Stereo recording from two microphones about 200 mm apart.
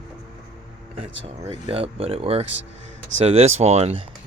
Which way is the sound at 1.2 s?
25° right (ahead or behind).